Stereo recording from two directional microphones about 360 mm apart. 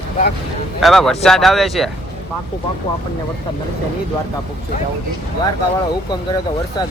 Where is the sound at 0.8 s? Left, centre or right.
Centre.